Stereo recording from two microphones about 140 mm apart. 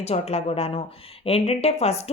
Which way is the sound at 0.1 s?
50° left (ahead or behind).